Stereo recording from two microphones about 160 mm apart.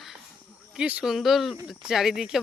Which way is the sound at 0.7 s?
5° right (ahead or behind).